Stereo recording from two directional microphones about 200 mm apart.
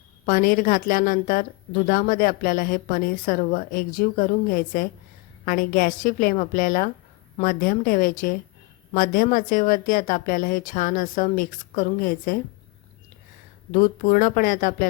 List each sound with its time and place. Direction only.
0.3 s a woman's voice: 45° left (ahead or behind)
13.7 s a woman's voice: 40° left (ahead or behind)